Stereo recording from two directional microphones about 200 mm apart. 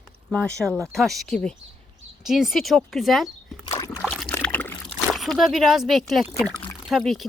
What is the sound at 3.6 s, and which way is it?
Slosh, 20° left (ahead or behind).